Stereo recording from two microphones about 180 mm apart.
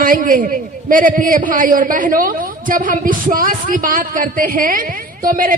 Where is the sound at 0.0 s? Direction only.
50° right (ahead or behind).